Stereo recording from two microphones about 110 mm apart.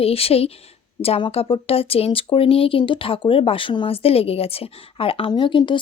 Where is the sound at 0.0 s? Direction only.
65° left (ahead or behind).